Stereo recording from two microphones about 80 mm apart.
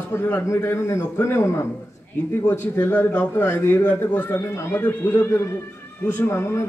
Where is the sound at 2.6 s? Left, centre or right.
Left.